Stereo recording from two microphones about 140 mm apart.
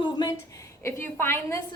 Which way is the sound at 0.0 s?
30° left (ahead or behind).